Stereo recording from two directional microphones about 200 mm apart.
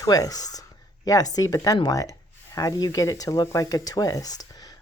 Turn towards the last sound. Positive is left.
turn(degrees=20)  # may be behind; listen again after turning